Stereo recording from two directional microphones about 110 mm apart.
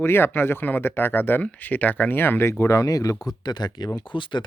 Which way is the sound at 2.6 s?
30° left (ahead or behind).